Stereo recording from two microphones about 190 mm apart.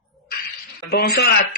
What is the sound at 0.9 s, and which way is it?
Speech, 55° left (ahead or behind).